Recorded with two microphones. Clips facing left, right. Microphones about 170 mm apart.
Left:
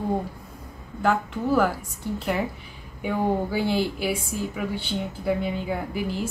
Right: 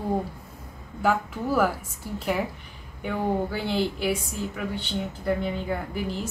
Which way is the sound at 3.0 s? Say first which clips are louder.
Left 2 dB; 10° left (ahead or behind).